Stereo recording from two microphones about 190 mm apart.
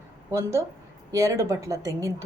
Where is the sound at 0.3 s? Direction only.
15° right (ahead or behind).